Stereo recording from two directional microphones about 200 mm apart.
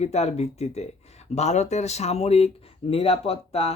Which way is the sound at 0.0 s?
35° left (ahead or behind).